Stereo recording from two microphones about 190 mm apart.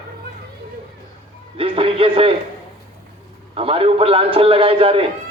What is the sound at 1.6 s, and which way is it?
Speech, 30° right (ahead or behind).